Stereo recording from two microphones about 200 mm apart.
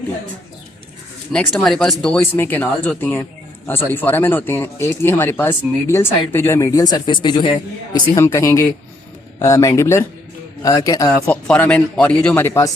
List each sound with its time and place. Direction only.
1.3 s speech: 5° left (ahead or behind)